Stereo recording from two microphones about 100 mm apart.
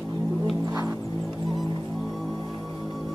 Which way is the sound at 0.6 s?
30° right (ahead or behind).